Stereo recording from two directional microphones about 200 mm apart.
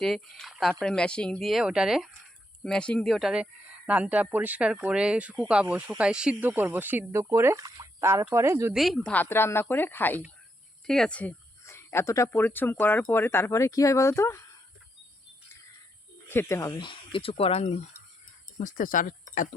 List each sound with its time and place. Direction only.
0.0 s speech: centre (ahead or behind); by 8.7 s 15° right (ahead or behind)
8.7 s speech: centre (ahead or behind)
16.3 s speech: 15° left (ahead or behind); by 19.5 s 40° left (ahead or behind)